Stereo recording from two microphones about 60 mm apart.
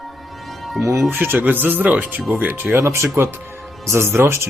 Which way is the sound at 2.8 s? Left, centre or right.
Right.